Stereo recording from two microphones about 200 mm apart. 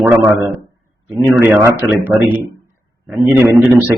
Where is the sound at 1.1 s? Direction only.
10° right (ahead or behind).